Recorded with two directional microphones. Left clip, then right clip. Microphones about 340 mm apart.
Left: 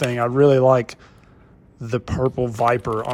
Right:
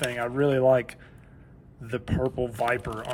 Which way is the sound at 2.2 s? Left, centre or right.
Right.